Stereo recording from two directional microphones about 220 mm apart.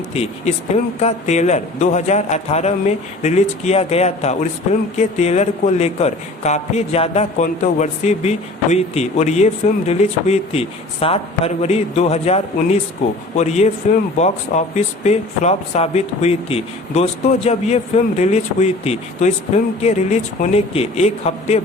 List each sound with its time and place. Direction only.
0.1 s a man's voice: 30° left (ahead or behind)